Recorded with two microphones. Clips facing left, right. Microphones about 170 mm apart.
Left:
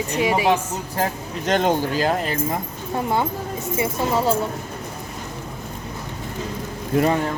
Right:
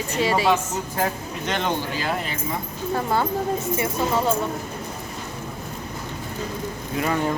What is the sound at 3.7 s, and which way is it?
Speech, 25° left (ahead or behind).